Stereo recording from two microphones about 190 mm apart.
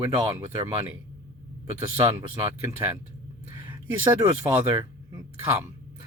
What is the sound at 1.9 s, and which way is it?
Speech, 15° right (ahead or behind).